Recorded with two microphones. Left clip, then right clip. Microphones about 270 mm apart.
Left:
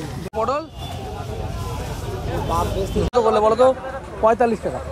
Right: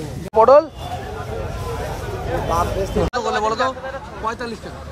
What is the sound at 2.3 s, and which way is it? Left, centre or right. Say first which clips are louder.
Speech: right 3 dB; left.